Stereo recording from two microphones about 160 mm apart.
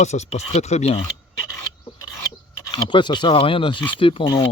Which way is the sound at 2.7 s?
30° left (ahead or behind).